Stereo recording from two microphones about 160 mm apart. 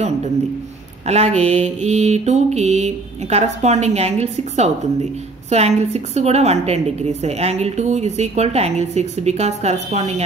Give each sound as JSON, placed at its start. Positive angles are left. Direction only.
{"t": 1.0, "sound": "a woman's voice", "side_deg": -40}